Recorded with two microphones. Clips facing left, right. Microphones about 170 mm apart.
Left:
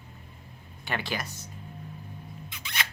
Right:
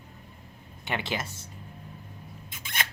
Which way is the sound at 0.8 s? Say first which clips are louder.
Right 1 dB; 20° right (ahead or behind).